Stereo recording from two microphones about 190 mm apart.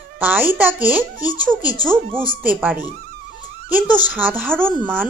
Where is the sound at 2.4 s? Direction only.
10° right (ahead or behind).